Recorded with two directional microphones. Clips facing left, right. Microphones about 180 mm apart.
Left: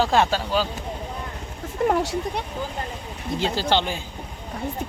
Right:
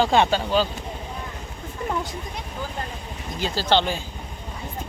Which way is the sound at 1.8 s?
70° left (ahead or behind).